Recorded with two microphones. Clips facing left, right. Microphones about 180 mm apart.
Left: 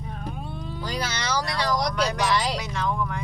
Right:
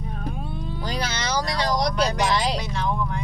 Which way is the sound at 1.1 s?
20° right (ahead or behind).